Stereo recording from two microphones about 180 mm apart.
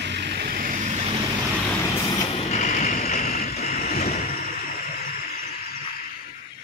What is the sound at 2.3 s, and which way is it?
Vehicle, 35° left (ahead or behind).